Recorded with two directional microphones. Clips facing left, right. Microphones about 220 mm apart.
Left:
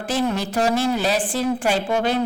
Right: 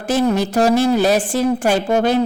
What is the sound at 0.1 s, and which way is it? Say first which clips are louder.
A woman's voice: right 6 dB; 45° right (ahead or behind).